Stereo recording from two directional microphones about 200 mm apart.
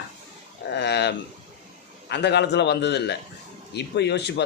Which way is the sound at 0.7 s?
60° left (ahead or behind).